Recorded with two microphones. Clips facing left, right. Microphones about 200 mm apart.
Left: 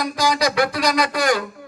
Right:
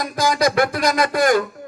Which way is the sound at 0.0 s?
50° right (ahead or behind).